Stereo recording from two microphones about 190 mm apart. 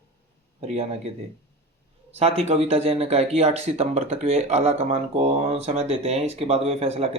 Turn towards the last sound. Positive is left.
turn(degrees=-30)  # may be behind; listen again after turning